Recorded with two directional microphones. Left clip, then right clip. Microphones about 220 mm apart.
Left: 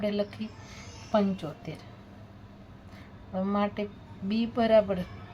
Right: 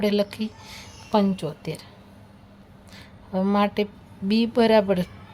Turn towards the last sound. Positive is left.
turn(degrees=-55)  # may be behind; listen again after turning